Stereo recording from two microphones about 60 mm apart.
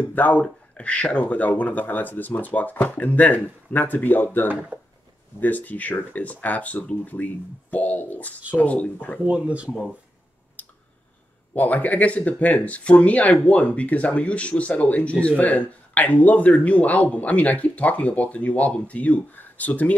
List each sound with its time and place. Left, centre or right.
0.1 s speech: left
9.2 s speech: right
11.5 s speech: left